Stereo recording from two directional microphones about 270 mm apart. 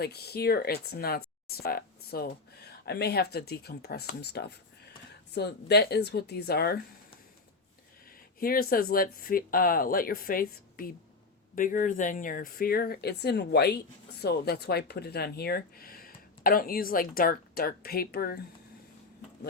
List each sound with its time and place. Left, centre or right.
0.0 s speech: left
8.4 s speech: left